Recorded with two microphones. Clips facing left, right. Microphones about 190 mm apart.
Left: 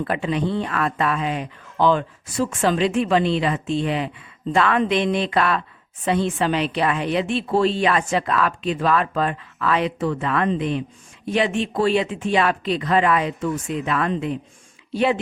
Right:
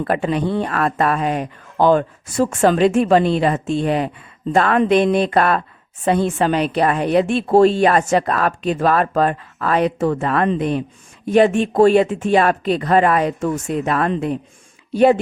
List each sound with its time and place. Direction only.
0.0 s a woman's voice: 50° right (ahead or behind)